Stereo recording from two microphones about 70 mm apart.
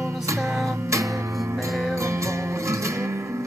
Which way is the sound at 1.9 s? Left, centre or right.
Right.